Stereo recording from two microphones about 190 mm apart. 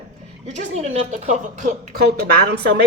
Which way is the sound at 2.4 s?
60° right (ahead or behind).